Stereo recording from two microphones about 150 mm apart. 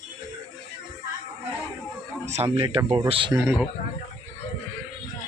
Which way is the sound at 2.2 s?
50° right (ahead or behind).